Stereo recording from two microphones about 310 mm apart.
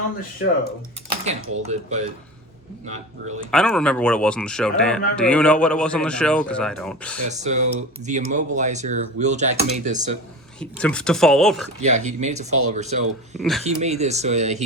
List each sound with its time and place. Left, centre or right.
1.2 s speech: right
3.5 s speech: centre
7.3 s speech: right
10.6 s speech: centre
11.8 s speech: right